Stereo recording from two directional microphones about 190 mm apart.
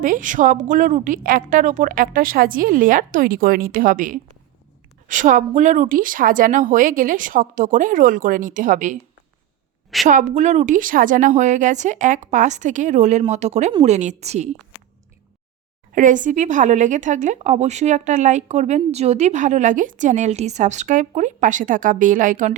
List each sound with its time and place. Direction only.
0.0 s a woman's voice: 45° right (ahead or behind)
10.1 s speech: 40° right (ahead or behind)
15.9 s speech: 45° right (ahead or behind)